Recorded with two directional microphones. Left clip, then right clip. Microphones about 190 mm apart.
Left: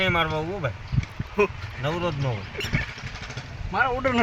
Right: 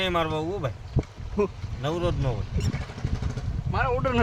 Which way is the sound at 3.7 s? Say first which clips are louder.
Left 3 dB; 40° left (ahead or behind).